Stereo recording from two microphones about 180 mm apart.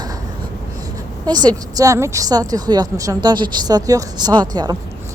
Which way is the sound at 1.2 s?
20° right (ahead or behind).